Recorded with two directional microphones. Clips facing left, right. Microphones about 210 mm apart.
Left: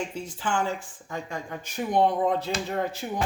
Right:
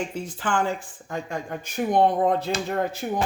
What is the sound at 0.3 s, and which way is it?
Speech, 55° right (ahead or behind).